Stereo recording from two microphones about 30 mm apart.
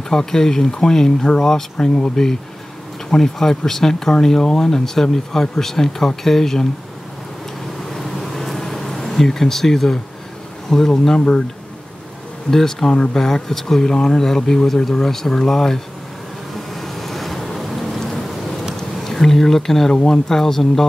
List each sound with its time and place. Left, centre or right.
0.1 s speech: centre
7.9 s a sound: centre
10.7 s speech: centre
12.4 s speech: centre
16.5 s vehicle: centre
18.0 s vehicle: centre
18.9 s speech: centre